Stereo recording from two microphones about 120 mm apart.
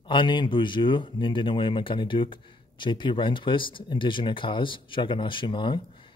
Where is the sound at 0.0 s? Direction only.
45° left (ahead or behind).